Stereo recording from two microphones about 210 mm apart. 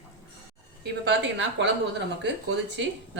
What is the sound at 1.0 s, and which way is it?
Speech, 55° right (ahead or behind).